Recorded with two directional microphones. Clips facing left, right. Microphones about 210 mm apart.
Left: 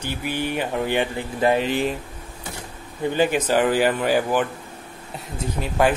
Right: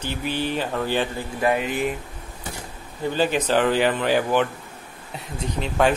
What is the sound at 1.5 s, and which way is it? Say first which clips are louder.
Speech: left 2 dB; 30° left (ahead or behind).